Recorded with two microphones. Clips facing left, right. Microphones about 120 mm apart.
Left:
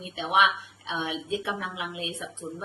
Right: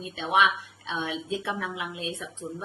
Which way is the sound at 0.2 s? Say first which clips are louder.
Even; 15° left (ahead or behind).